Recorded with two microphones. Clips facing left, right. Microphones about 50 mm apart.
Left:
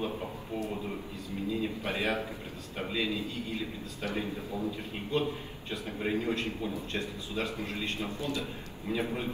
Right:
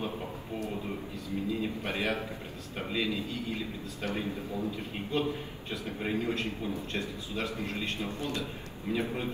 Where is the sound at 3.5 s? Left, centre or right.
Right.